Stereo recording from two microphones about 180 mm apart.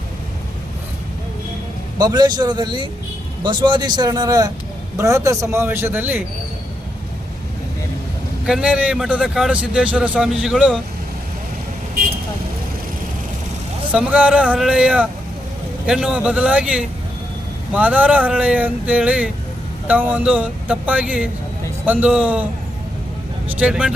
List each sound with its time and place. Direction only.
2.0 s a man's voice: 25° right (ahead or behind)
8.4 s a man's voice: 5° right (ahead or behind)
13.9 s speech: 5° right (ahead or behind)
23.5 s speech: 5° right (ahead or behind)